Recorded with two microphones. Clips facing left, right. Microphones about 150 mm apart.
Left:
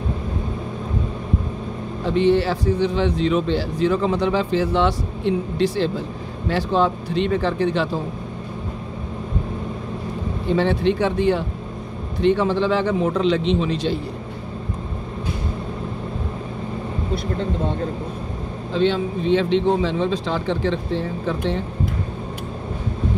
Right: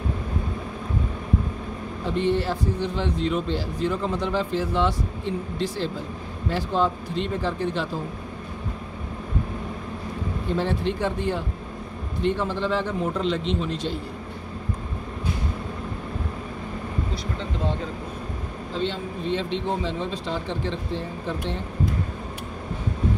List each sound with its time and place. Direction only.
2.1 s speech: 90° left
10.5 s speech: 80° left
18.7 s speech: 80° left